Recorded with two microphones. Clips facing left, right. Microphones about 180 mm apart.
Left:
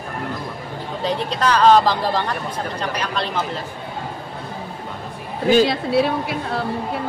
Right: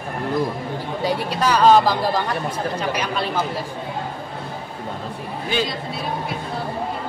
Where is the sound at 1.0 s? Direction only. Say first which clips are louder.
Left 1 dB; 10° right (ahead or behind).